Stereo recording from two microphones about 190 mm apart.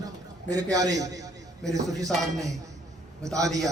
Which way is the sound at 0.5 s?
20° right (ahead or behind).